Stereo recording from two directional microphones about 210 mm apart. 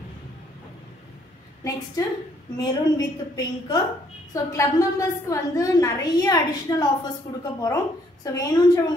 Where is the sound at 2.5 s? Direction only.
20° left (ahead or behind).